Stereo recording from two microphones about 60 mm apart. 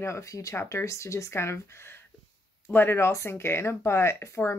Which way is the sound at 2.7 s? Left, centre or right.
Left.